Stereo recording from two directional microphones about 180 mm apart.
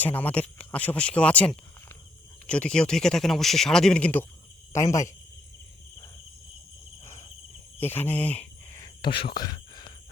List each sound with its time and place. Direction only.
0.0 s speech: 10° left (ahead or behind)
7.0 s insect: 15° left (ahead or behind)
7.8 s cricket: 10° left (ahead or behind)